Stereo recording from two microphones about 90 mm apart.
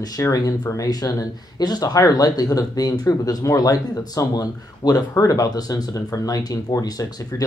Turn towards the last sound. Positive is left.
turn(degrees=45)  # may be behind; listen again after turning